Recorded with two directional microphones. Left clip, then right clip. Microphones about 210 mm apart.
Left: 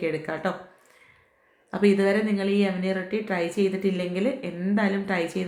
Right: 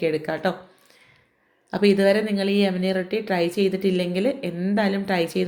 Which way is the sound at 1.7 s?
25° right (ahead or behind).